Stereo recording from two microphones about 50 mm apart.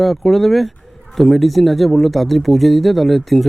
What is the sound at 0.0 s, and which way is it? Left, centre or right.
A man's voice, centre.